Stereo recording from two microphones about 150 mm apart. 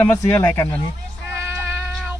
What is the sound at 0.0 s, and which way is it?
Speech, 15° left (ahead or behind).